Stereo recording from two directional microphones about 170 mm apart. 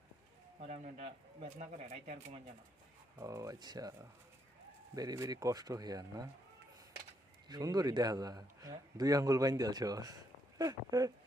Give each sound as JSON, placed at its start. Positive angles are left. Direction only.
{"t": 0.6, "sound": "speech", "side_deg": -45}
{"t": 3.2, "sound": "a man's voice", "side_deg": -20}
{"t": 7.4, "sound": "a man's voice", "side_deg": -25}